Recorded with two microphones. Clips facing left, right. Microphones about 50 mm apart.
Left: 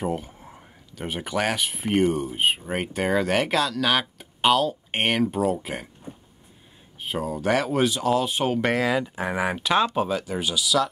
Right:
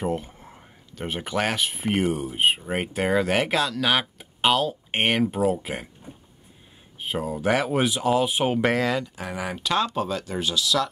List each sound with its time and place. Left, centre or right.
0.0 s speech: centre
9.0 s speech: left